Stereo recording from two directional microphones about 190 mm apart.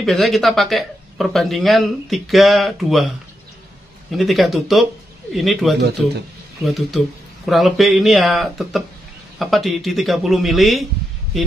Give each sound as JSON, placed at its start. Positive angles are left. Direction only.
{"t": 0.0, "sound": "speech", "side_deg": 0}
{"t": 4.1, "sound": "speech", "side_deg": 0}